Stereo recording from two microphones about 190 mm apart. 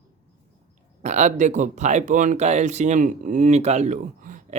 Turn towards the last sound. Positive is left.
turn(degrees=-45)  # may be behind; listen again after turning